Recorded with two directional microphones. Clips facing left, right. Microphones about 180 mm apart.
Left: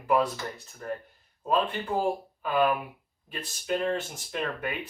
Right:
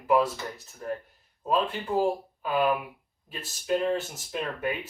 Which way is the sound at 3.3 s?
5° right (ahead or behind).